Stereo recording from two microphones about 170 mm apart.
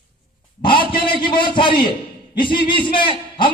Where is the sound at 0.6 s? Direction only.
30° left (ahead or behind).